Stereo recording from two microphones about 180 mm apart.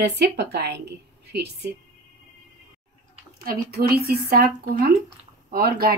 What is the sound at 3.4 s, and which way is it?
Speech, 55° right (ahead or behind).